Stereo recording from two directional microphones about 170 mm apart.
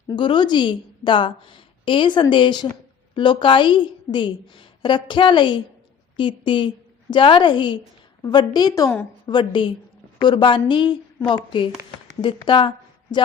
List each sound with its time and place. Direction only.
0.2 s a woman's voice: 25° left (ahead or behind)